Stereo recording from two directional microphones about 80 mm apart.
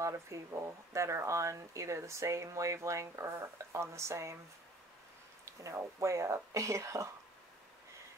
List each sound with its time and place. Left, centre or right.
0.0 s speech: right
5.4 s speech: right